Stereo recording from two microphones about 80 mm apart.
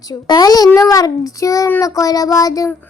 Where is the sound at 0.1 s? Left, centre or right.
Left.